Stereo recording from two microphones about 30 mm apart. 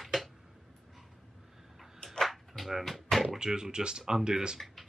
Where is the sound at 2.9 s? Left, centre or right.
Centre.